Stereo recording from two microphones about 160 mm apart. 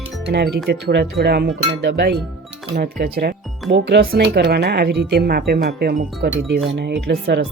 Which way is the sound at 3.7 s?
90° right.